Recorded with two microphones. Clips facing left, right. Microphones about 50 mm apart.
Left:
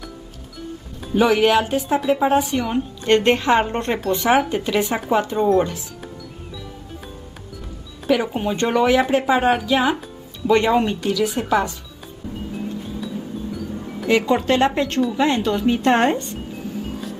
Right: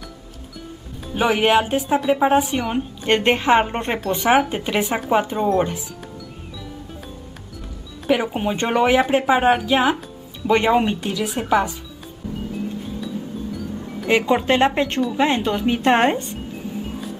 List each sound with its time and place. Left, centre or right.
1.1 s a woman's voice: centre
8.1 s a woman's voice: centre
12.8 s music: centre
14.0 s a woman's voice: centre
16.8 s music: centre